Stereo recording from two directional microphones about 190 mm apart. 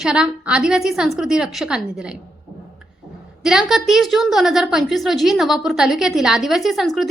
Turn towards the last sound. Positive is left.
turn(degrees=0)  # may be behind; listen again after turning